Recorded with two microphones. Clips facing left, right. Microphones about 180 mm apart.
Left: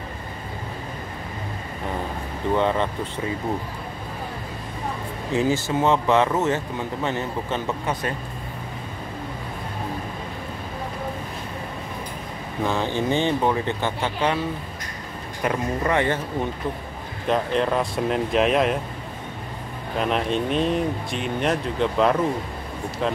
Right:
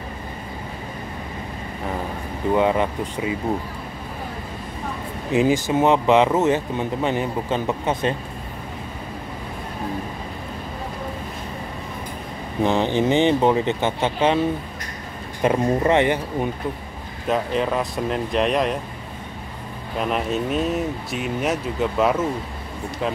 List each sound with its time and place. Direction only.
2.5 s speech: 10° right (ahead or behind)
5.3 s speech: 15° right (ahead or behind)
12.6 s speech: 20° right (ahead or behind)
15.4 s speech: 20° right (ahead or behind)
17.3 s speech: 5° right (ahead or behind)
20.0 s speech: 5° right (ahead or behind)